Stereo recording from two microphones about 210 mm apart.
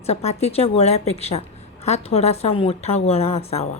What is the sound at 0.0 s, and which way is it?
A woman's voice, 30° left (ahead or behind).